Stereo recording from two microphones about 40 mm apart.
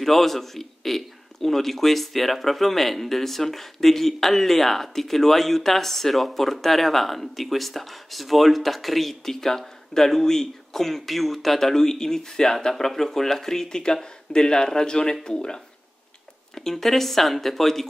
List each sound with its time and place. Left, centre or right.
0.0 s a man's voice: centre